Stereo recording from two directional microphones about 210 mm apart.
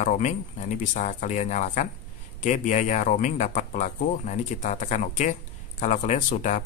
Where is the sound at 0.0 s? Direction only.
35° left (ahead or behind).